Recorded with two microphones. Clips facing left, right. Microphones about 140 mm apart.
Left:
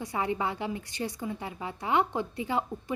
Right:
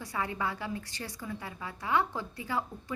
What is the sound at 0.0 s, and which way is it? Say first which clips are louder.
A woman's voice: left 4 dB; 20° left (ahead or behind).